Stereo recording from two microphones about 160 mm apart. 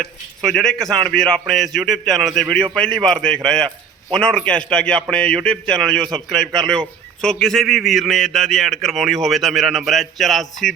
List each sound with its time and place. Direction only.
0.0 s a man's voice: 5° left (ahead or behind)